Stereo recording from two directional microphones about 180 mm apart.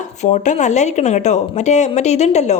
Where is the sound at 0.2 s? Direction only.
40° left (ahead or behind).